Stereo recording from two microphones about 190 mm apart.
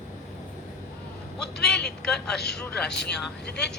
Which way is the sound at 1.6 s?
60° left (ahead or behind).